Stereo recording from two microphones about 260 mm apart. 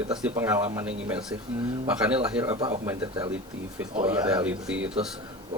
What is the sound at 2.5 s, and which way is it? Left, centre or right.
Speech, right.